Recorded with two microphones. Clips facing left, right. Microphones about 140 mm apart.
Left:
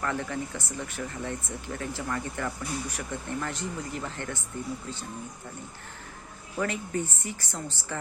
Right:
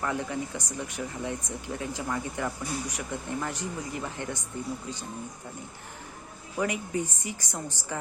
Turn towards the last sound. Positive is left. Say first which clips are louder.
# right 1 dB
turn(degrees=-15)  # may be behind; listen again after turning